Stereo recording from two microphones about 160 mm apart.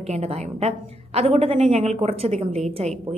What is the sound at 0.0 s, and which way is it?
A woman's voice, 40° right (ahead or behind).